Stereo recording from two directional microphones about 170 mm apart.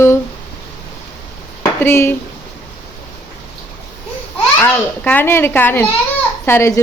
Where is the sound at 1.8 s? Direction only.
15° left (ahead or behind).